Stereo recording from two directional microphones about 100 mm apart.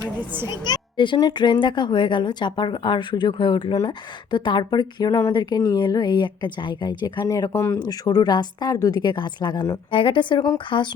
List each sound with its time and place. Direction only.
0.4 s speech: 45° left (ahead or behind)
7.3 s speech: 30° left (ahead or behind)
7.8 s speech: 40° left (ahead or behind)
9.9 s a woman's voice: 55° left (ahead or behind)